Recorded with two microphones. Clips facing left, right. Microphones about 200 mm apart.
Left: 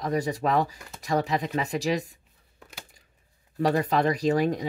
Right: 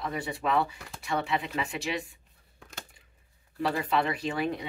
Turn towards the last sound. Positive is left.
turn(degrees=40)  # may be behind; listen again after turning